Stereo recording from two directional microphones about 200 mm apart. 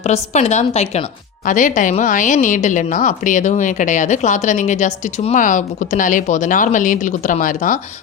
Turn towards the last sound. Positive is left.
turn(degrees=40)  # may be behind; listen again after turning